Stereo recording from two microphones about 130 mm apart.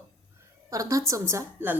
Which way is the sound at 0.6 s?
25° right (ahead or behind).